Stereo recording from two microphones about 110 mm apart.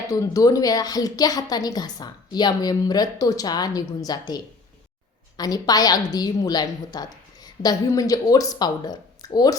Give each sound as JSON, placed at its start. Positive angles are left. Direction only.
{"t": 0.1, "sound": "a woman's voice", "side_deg": 30}